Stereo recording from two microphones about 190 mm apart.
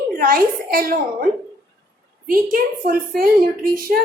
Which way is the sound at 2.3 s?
50° right (ahead or behind).